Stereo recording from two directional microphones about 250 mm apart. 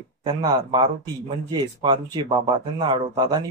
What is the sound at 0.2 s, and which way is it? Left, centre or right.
Speech, centre.